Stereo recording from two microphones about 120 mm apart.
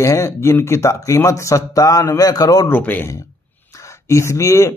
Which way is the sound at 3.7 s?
25° left (ahead or behind).